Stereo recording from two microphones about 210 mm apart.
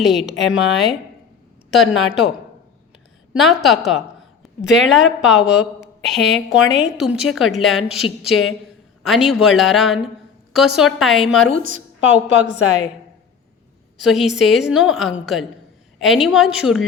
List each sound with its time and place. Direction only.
0.0 s a woman's voice: centre (ahead or behind)
2.0 s a woman's voice: centre (ahead or behind)
3.3 s a woman's voice: centre (ahead or behind)
6.1 s a woman's voice: centre (ahead or behind)
11.6 s a woman's voice: 35° right (ahead or behind)
14.0 s a woman's voice: centre (ahead or behind)